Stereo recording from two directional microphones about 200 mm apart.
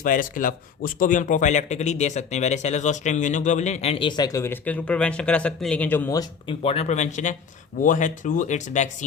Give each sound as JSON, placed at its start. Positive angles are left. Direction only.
{"t": 0.0, "sound": "a man's voice", "side_deg": 40}
{"t": 6.5, "sound": "a man's voice", "side_deg": 30}